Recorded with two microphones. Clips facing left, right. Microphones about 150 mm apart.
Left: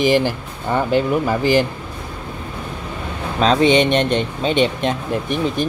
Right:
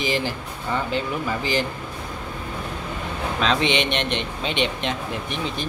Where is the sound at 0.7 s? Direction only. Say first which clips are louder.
Left 8 dB; 50° left (ahead or behind).